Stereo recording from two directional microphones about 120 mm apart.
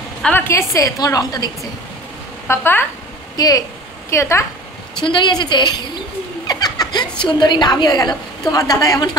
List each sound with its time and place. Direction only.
0.2 s a woman's voice: 10° left (ahead or behind)
0.5 s a woman's voice: 25° left (ahead or behind)
2.4 s speech: 20° left (ahead or behind)
3.3 s a woman's voice: 30° left (ahead or behind)
5.0 s a woman's voice: 40° left (ahead or behind)